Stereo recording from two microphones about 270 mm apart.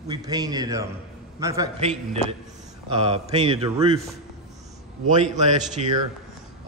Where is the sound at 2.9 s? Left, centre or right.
Right.